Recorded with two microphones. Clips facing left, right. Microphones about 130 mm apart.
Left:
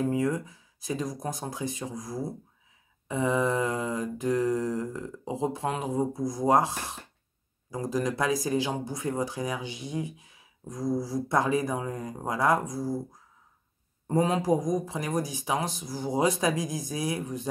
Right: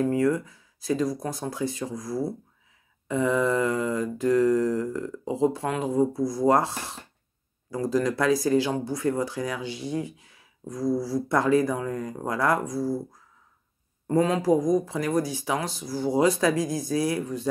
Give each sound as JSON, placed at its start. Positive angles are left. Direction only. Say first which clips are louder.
{"t": 0.0, "sound": "speech", "louder": "right 4 dB", "side_deg": 20}
{"t": 14.0, "sound": "speech", "louder": "right 3 dB", "side_deg": 20}